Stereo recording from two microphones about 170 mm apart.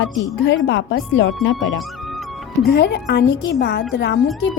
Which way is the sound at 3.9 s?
90° left.